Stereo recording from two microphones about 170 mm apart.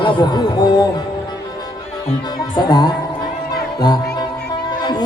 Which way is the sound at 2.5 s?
25° left (ahead or behind).